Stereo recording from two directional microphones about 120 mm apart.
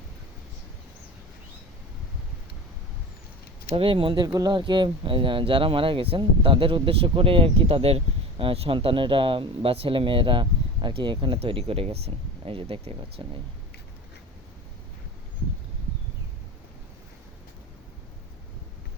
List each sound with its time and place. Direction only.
3.8 s speech: 45° right (ahead or behind)